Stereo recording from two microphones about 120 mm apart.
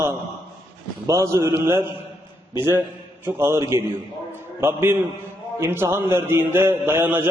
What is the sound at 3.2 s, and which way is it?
A man's voice, 20° right (ahead or behind).